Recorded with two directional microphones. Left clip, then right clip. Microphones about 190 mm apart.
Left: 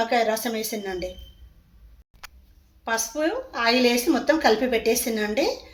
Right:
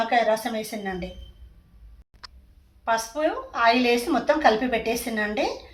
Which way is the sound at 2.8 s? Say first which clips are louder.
Right 1 dB; 50° left (ahead or behind).